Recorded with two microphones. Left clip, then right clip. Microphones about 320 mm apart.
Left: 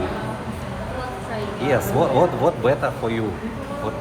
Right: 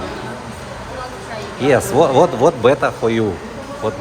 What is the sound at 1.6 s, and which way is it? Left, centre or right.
Speech, right.